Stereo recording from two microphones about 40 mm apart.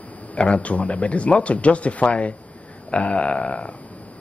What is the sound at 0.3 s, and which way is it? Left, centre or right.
Speech, left.